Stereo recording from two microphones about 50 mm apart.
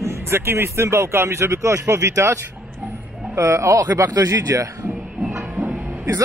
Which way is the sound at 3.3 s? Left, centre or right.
Right.